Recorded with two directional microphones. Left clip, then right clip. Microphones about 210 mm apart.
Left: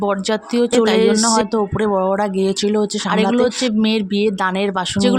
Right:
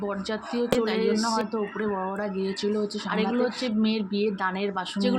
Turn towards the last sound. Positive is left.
turn(degrees=55)  # may be behind; listen again after turning